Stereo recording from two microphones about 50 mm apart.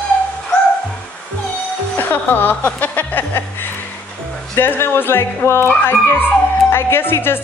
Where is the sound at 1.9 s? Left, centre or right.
Left.